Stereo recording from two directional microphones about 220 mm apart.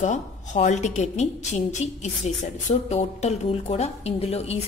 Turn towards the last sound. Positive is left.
turn(degrees=30)  # may be behind; listen again after turning